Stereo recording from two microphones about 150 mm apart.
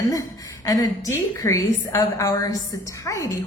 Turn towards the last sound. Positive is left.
turn(degrees=20)  # may be behind; listen again after turning